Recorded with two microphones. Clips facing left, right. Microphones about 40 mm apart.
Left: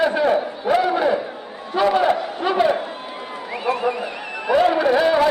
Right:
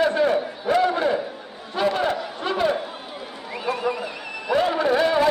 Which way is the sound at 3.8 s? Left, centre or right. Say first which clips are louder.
Left 3 dB; centre.